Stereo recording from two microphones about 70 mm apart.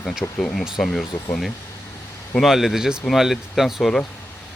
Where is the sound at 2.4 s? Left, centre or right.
Centre.